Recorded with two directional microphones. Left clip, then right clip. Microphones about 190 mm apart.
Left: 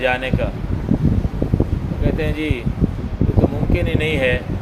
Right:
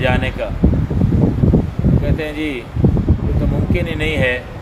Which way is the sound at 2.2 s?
15° left (ahead or behind).